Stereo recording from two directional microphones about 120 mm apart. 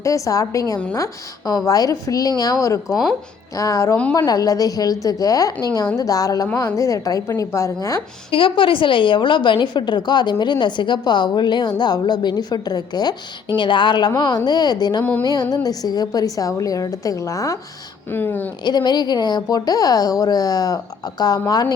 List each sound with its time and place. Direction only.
0.0 s a woman's voice: 25° left (ahead or behind)
2.8 s speech: centre (ahead or behind)
3.5 s a woman's voice: 25° left (ahead or behind)
8.3 s a woman's voice: 45° left (ahead or behind); by 17.6 s 30° left (ahead or behind)
18.1 s speech: 15° left (ahead or behind)
18.6 s a woman's voice: 35° left (ahead or behind)